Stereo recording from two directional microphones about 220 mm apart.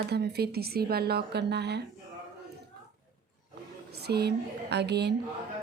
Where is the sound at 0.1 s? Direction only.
45° right (ahead or behind).